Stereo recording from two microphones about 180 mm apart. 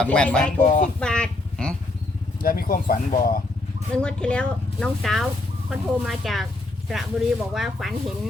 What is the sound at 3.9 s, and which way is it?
Speech, 5° left (ahead or behind).